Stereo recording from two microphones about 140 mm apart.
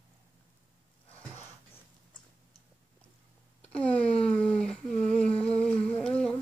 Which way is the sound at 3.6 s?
10° left (ahead or behind).